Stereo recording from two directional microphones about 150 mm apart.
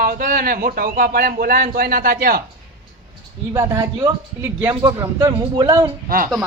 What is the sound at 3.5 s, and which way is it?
Speech, 20° right (ahead or behind).